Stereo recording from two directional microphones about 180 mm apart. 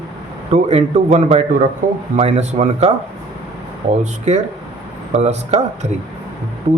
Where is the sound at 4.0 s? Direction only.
40° right (ahead or behind).